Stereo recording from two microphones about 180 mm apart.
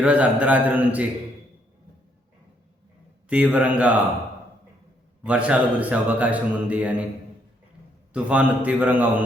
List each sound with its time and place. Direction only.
0.0 s a man's voice: 5° right (ahead or behind)
3.2 s a man's voice: 5° right (ahead or behind)
5.2 s a man's voice: 5° right (ahead or behind)
8.1 s a man's voice: 5° right (ahead or behind)